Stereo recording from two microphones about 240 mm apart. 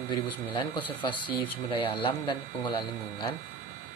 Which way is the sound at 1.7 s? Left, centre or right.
Left.